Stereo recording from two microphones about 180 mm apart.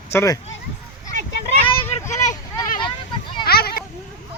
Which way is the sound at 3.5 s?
60° left (ahead or behind).